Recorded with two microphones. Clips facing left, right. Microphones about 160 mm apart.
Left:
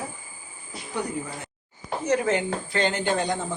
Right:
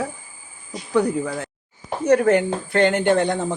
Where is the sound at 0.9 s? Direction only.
90° right.